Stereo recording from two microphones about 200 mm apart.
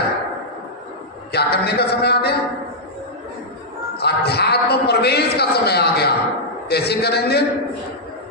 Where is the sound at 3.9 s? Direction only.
55° left (ahead or behind).